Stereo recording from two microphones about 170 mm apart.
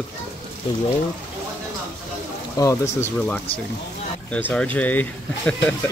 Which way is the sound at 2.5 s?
15° left (ahead or behind).